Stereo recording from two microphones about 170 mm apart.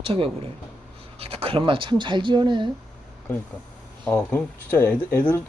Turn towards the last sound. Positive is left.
turn(degrees=10)  # may be behind; listen again after turning